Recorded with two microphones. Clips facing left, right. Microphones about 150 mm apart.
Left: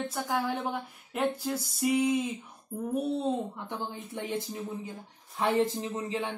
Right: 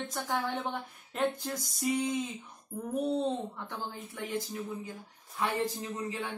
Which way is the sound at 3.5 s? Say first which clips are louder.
Left 3 dB; 20° left (ahead or behind).